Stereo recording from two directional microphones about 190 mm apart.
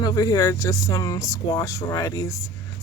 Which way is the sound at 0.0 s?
20° left (ahead or behind).